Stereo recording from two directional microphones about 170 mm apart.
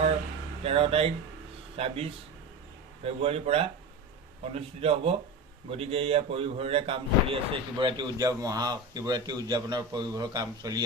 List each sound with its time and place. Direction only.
0.6 s speech: 35° right (ahead or behind)